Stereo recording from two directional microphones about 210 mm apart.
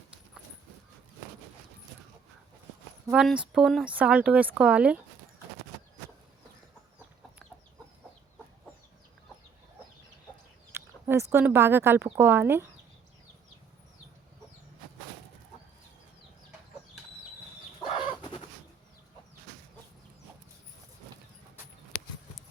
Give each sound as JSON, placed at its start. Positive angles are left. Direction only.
{"t": 3.1, "sound": "speech", "side_deg": -5}
{"t": 10.8, "sound": "speech", "side_deg": -15}
{"t": 17.8, "sound": "chicken", "side_deg": 25}
{"t": 21.9, "sound": "a sound", "side_deg": 40}